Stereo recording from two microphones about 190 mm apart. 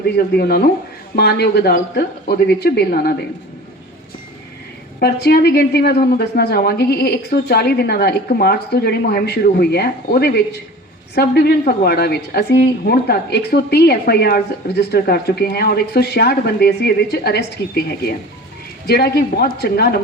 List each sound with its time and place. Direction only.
0.2 s a woman's voice: 55° left (ahead or behind)
4.9 s a woman's voice: 55° left (ahead or behind)